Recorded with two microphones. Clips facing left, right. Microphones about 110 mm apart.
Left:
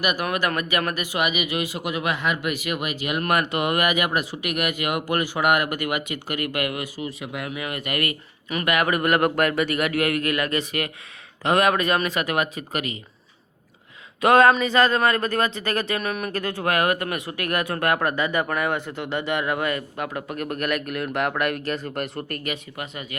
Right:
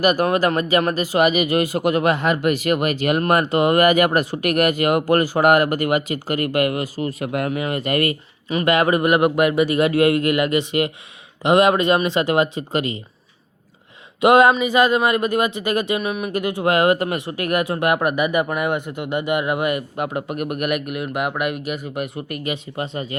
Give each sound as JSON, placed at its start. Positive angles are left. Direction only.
{"t": 0.0, "sound": "speech", "side_deg": -40}
{"t": 3.2, "sound": "speech", "side_deg": -35}
{"t": 7.0, "sound": "speech", "side_deg": -50}
{"t": 7.6, "sound": "speech", "side_deg": -30}
{"t": 14.2, "sound": "speech", "side_deg": -15}
{"t": 22.4, "sound": "speech", "side_deg": -30}